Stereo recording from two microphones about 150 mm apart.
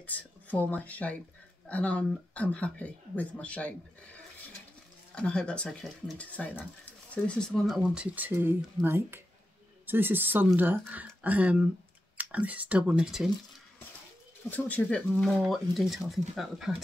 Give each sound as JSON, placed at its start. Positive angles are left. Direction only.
{"t": 0.0, "sound": "speech", "side_deg": 10}
{"t": 14.5, "sound": "speech", "side_deg": 10}